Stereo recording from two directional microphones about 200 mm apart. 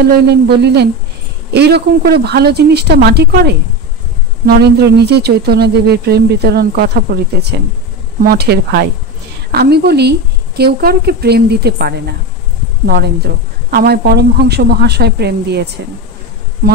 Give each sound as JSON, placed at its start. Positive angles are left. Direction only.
{"t": 0.0, "sound": "a woman's voice", "side_deg": -55}
{"t": 16.6, "sound": "a woman's voice", "side_deg": -45}